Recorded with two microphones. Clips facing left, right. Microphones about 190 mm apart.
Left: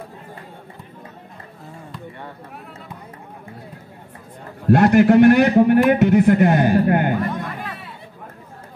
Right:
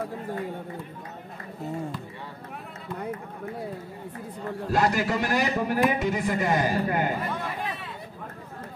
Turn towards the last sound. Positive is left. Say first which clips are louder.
# left 9 dB
turn(degrees=65)  # may be behind; listen again after turning